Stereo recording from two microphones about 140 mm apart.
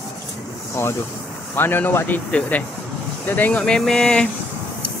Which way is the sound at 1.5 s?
15° left (ahead or behind).